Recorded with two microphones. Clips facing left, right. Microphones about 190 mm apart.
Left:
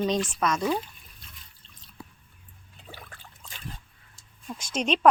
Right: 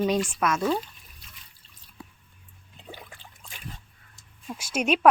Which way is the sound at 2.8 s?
20° right (ahead or behind).